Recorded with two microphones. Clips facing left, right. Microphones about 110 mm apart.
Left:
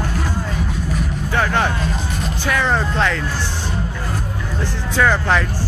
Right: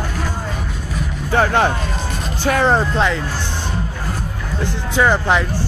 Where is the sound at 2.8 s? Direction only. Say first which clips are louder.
Right 2 dB; 15° right (ahead or behind).